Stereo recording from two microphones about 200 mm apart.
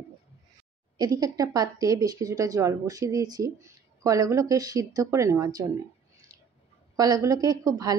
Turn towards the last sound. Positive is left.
turn(degrees=-20)  # may be behind; listen again after turning